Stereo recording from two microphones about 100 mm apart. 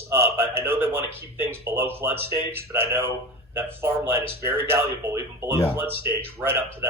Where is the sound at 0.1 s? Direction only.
25° right (ahead or behind).